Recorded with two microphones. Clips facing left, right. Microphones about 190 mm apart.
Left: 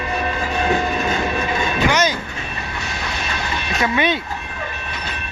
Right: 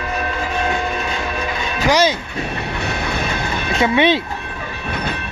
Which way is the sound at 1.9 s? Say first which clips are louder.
Right 5 dB; 30° right (ahead or behind).